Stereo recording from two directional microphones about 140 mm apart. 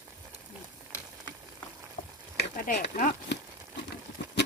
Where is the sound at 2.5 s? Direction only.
70° left (ahead or behind).